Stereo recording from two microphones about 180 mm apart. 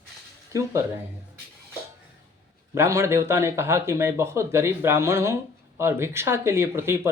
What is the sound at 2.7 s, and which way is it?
Speech, 15° right (ahead or behind).